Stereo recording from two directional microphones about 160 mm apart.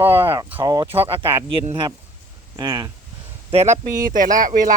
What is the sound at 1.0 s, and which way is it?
Speech, 15° right (ahead or behind).